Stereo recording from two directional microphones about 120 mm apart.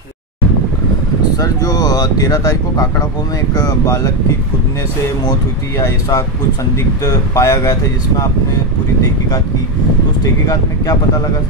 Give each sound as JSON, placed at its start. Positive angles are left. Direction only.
{"t": 1.3, "sound": "speech", "side_deg": 30}
{"t": 5.8, "sound": "speech", "side_deg": 25}